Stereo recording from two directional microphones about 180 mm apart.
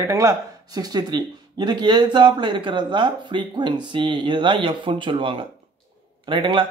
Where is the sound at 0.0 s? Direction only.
20° right (ahead or behind).